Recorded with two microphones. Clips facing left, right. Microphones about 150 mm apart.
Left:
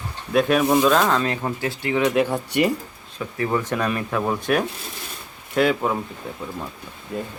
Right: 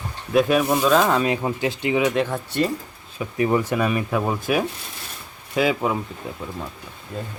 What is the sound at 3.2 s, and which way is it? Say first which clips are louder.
Speech: right 3 dB; 20° right (ahead or behind).